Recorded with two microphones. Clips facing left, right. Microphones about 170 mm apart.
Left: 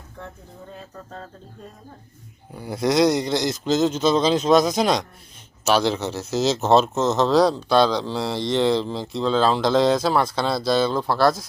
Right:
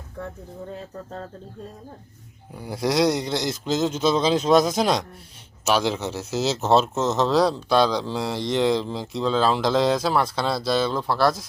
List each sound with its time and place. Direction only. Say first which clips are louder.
2.6 s speech: left 3 dB; 5° right (ahead or behind)